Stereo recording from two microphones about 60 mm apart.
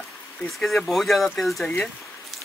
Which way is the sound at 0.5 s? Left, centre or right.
Centre.